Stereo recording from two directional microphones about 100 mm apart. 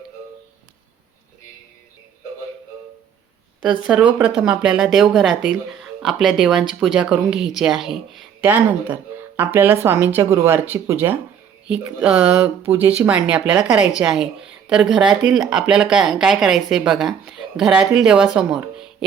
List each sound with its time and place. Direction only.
3.6 s a woman's voice: 5° right (ahead or behind)
8.4 s speech: 20° right (ahead or behind)
11.8 s a woman's voice: 5° right (ahead or behind)
12.6 s a woman's voice: 20° right (ahead or behind)